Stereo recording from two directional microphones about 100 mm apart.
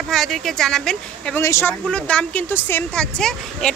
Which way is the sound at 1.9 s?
10° left (ahead or behind).